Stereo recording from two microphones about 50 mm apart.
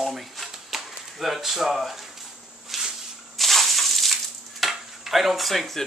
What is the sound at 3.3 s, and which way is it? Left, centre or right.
Sizzle, centre.